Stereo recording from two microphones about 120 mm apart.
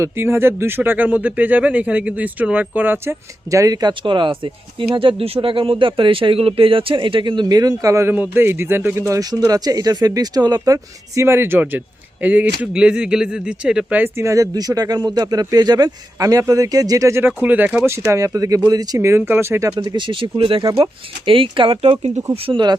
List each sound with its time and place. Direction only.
0.0 s speech: 20° right (ahead or behind)
17.8 s speech: 25° right (ahead or behind)
19.7 s speech: 40° right (ahead or behind)